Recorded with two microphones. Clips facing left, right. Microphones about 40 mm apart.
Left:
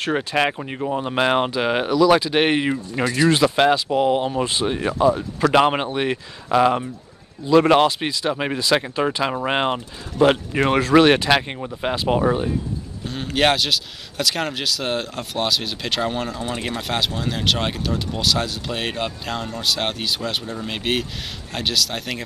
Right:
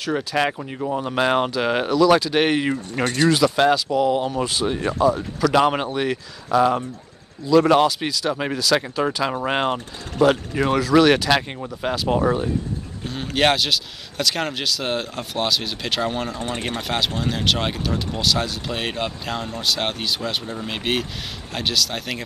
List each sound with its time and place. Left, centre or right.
0.0 s speech: left
0.4 s speech: centre
3.2 s speech: left
6.5 s speech: left
9.0 s speech: centre
10.2 s speech: left
11.1 s speech: left
13.1 s speech: centre